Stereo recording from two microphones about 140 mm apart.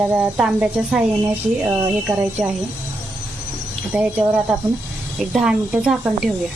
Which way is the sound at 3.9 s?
10° right (ahead or behind).